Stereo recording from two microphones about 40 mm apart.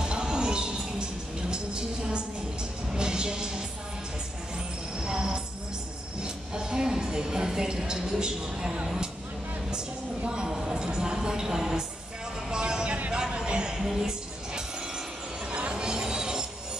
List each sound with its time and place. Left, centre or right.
0.0 s music: centre
4.9 s music: centre
8.8 s speech: centre
9.7 s a sound: right
10.5 s music: centre
13.7 s music: centre
15.7 s train: centre